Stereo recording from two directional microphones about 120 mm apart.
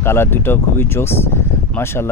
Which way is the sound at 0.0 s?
20° left (ahead or behind).